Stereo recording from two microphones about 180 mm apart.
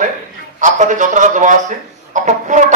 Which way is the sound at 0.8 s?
45° right (ahead or behind).